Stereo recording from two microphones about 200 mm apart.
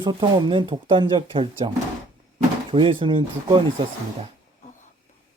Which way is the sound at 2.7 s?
25° right (ahead or behind).